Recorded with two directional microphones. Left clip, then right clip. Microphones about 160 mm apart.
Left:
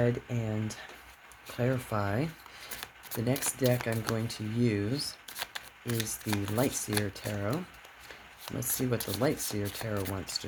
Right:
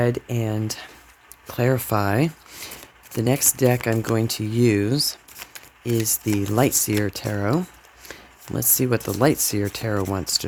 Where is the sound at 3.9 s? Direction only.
90° right.